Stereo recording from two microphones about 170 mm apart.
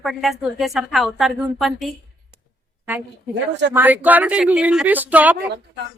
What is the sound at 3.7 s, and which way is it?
Speech, 10° right (ahead or behind).